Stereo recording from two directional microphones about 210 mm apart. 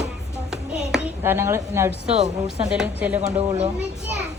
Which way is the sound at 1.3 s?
15° right (ahead or behind).